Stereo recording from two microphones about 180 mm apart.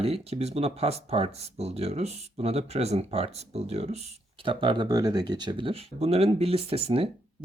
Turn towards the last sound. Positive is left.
turn(degrees=-30)  # may be behind; listen again after turning